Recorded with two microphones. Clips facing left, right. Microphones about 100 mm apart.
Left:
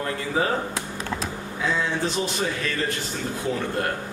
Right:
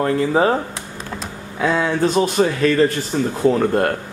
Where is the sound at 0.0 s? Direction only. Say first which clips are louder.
Right 9 dB; 45° right (ahead or behind).